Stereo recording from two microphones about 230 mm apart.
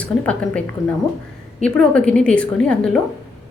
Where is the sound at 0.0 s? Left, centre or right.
Centre.